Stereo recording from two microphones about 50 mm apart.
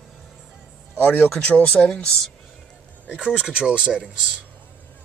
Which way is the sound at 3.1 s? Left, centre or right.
Centre.